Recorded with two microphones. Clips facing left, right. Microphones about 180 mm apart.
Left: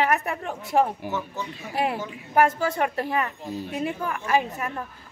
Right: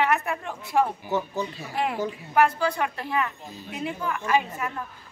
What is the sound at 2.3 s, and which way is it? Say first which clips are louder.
A woman's voice: left 1 dB; 45° left (ahead or behind).